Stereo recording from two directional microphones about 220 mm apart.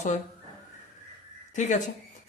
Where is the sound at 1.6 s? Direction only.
30° left (ahead or behind).